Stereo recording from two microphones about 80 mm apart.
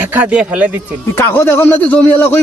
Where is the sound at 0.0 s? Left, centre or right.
Right.